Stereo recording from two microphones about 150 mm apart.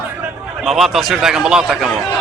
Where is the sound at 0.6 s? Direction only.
Centre (ahead or behind).